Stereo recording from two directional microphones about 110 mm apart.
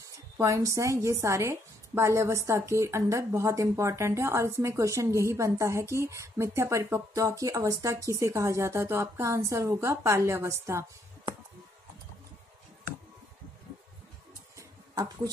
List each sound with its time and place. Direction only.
0.4 s a woman's voice: 30° right (ahead or behind)